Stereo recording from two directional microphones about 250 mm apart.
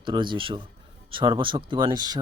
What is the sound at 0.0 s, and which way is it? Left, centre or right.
Speech, centre.